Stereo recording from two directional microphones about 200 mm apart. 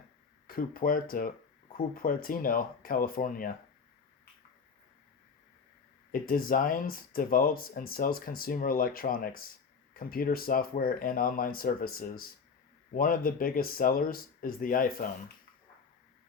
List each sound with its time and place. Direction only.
0.4 s speech: 45° left (ahead or behind)
6.1 s speech: 45° left (ahead or behind)